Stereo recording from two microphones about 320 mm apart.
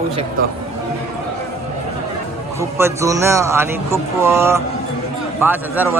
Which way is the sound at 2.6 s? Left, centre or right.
Centre.